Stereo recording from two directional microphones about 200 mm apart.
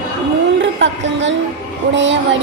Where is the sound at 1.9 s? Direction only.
65° right (ahead or behind).